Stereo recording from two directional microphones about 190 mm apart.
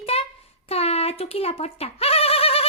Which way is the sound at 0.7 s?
30° left (ahead or behind).